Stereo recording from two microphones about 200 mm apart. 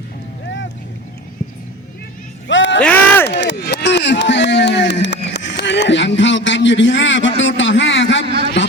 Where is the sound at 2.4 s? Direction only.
65° left (ahead or behind).